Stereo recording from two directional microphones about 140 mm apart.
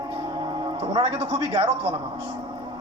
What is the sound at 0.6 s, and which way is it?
A man's voice, 40° right (ahead or behind).